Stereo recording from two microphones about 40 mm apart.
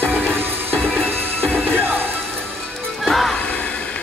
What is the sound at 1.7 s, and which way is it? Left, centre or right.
Music, right.